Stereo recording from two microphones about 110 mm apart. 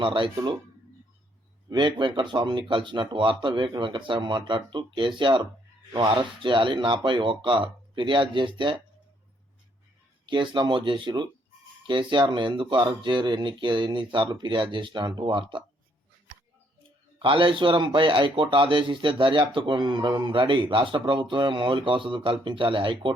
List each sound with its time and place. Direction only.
0.0 s a man's voice: 50° right (ahead or behind)
1.7 s a man's voice: 45° right (ahead or behind)
10.2 s a man's voice: 45° right (ahead or behind)
17.2 s a man's voice: 50° right (ahead or behind)